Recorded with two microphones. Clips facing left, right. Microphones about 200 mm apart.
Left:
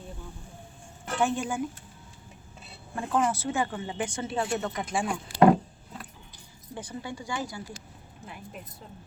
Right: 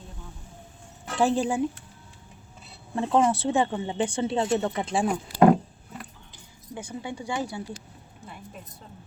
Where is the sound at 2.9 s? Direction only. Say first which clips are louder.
Right 5 dB; 30° right (ahead or behind).